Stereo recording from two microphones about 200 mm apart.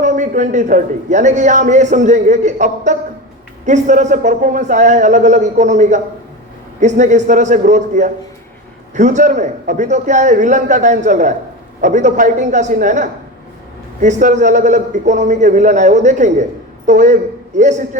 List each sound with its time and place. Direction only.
0.0 s a man's voice: 40° right (ahead or behind)